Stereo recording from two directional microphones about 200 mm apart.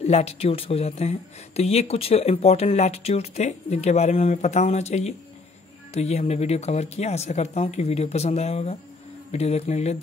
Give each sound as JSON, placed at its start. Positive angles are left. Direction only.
{"t": 0.0, "sound": "speech", "side_deg": 30}